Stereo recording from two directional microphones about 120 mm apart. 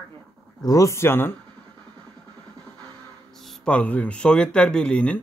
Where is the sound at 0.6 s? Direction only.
30° left (ahead or behind).